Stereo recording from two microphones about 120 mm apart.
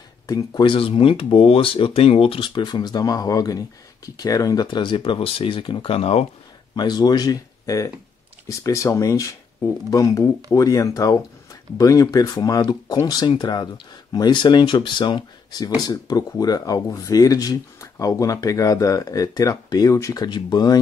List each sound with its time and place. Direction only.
0.3 s speech: 30° left (ahead or behind)
0.7 s speech: 50° left (ahead or behind)
6.7 s speech: 35° left (ahead or behind)